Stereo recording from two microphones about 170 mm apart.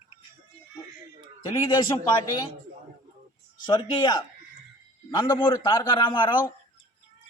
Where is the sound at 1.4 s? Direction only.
25° left (ahead or behind).